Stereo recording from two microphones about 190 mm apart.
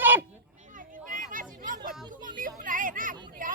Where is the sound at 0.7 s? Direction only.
45° right (ahead or behind).